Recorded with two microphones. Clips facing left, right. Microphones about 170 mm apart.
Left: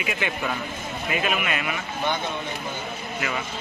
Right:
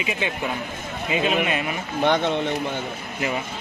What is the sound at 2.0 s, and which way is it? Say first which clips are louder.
Speech: right 8 dB; 75° right (ahead or behind).